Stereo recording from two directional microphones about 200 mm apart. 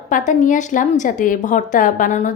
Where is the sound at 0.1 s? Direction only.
40° left (ahead or behind).